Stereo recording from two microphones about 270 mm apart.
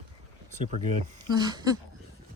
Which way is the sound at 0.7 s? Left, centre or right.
Right.